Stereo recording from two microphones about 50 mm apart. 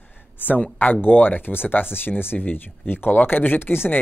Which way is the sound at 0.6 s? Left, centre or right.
Left.